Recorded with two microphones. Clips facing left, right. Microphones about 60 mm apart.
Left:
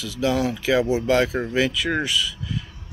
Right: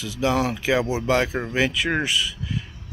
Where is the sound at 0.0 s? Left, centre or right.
Right.